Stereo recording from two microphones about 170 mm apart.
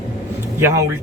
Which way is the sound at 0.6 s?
20° right (ahead or behind).